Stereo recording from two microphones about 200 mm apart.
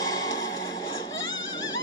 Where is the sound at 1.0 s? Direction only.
70° left (ahead or behind).